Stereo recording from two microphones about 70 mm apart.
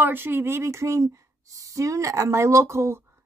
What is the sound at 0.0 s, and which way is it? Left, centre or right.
A woman's voice, right.